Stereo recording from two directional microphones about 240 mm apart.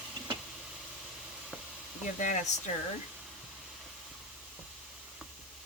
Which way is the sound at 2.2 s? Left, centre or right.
Left.